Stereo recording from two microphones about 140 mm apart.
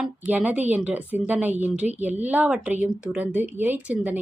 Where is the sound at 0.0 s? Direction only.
10° right (ahead or behind).